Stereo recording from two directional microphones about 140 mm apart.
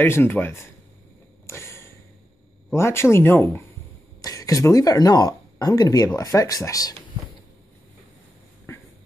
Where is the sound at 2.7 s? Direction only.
20° left (ahead or behind).